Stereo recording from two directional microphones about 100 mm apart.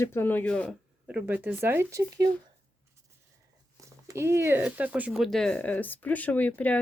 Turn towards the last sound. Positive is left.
turn(degrees=15)  # may be behind; listen again after turning